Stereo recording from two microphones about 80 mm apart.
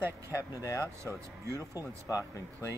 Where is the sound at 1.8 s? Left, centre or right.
Left.